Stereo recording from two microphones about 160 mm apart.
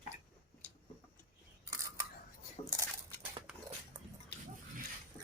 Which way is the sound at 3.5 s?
5° right (ahead or behind).